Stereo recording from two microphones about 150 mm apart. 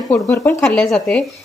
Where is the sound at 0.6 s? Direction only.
5° left (ahead or behind).